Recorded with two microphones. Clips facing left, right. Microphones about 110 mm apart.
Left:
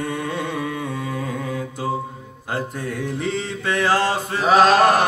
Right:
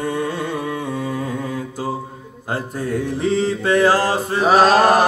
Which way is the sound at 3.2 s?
35° right (ahead or behind).